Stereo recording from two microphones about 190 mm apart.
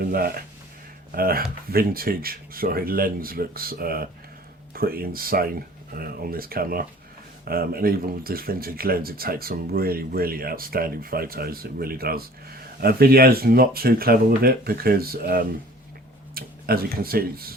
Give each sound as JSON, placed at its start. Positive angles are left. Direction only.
{"t": 0.0, "sound": "speech", "side_deg": -50}